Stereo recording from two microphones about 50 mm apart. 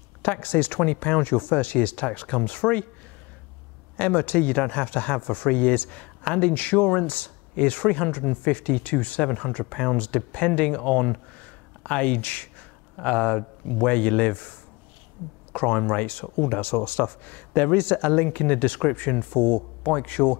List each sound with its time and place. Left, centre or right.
0.2 s speech: left
3.9 s speech: left
13.0 s speech: left
15.5 s speech: left